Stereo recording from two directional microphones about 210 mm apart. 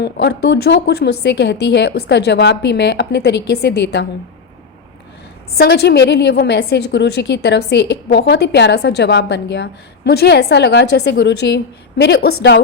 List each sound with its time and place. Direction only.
0.0 s a woman's voice: 55° left (ahead or behind)
5.5 s a woman's voice: 50° left (ahead or behind)